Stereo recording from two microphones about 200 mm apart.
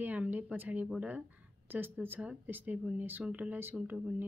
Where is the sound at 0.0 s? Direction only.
10° right (ahead or behind).